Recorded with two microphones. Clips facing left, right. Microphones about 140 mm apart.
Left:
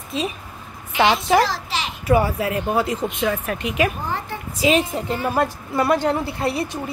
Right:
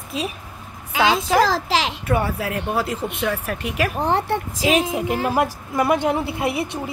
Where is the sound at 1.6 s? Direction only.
90° right.